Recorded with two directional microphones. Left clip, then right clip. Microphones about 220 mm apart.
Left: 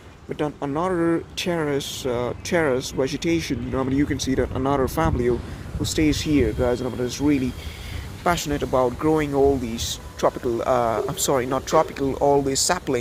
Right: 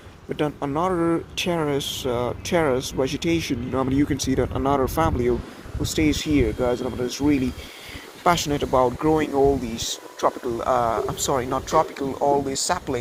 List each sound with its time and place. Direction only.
0.6 s speech: 5° left (ahead or behind); by 13.0 s 45° left (ahead or behind)